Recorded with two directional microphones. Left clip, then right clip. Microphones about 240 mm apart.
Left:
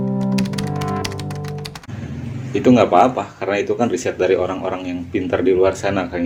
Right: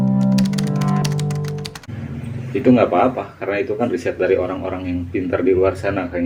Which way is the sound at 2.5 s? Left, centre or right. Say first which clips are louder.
Left 2 dB; left.